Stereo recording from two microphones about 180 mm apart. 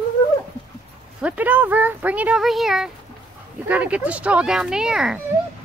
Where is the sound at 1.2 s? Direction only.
10° right (ahead or behind).